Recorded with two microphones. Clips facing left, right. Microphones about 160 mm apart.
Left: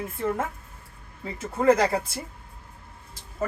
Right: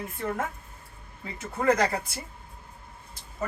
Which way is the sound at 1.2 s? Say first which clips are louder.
Left 4 dB; 30° left (ahead or behind).